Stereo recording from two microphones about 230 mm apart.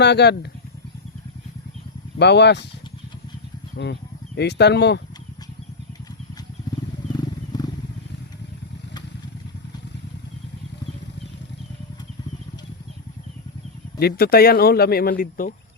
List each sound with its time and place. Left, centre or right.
0.0 s speech: left
2.1 s speech: left
4.4 s speech: left
7.1 s wild animals: centre
14.0 s speech: left